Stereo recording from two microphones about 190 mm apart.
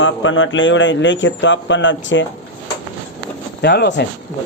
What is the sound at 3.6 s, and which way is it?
Speech, 60° left (ahead or behind).